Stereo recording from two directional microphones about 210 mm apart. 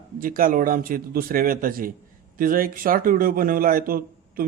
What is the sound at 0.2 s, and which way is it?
A man's voice, 40° right (ahead or behind).